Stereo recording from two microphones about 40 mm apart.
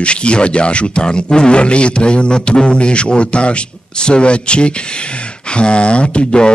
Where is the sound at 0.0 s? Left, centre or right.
Left.